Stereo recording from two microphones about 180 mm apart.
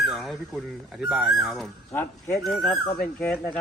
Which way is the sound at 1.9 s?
15° left (ahead or behind).